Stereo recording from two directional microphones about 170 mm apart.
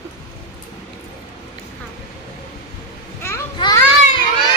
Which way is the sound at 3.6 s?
25° left (ahead or behind).